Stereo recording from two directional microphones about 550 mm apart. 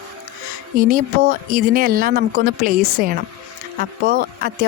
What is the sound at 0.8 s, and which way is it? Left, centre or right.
Speech, centre.